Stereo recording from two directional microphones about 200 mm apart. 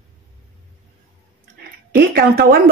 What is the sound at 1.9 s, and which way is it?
Speech, 50° right (ahead or behind).